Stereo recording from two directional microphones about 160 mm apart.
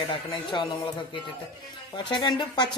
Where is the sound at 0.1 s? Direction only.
30° left (ahead or behind).